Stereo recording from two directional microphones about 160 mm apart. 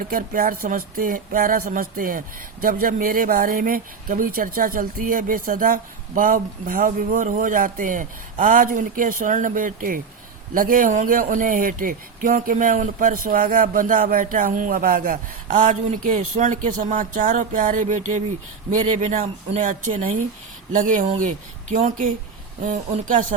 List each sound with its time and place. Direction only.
0.1 s speech: 60° right (ahead or behind)
20.7 s speech: 55° right (ahead or behind)